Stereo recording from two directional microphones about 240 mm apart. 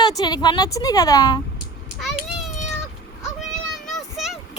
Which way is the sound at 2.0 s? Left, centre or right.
Centre.